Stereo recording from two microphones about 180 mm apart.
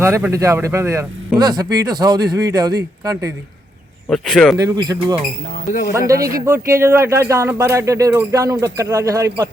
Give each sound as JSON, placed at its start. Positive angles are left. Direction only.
{"t": 0.0, "sound": "speech", "side_deg": -15}
{"t": 4.1, "sound": "speech", "side_deg": 0}
{"t": 4.5, "sound": "speech", "side_deg": -20}